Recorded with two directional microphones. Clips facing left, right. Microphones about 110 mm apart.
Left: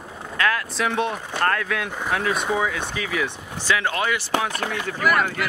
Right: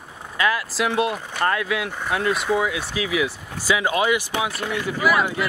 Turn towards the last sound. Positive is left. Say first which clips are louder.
# right 1 dB
turn(degrees=-5)  # may be behind; listen again after turning